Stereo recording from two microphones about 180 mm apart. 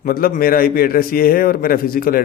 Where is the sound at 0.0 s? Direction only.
50° left (ahead or behind).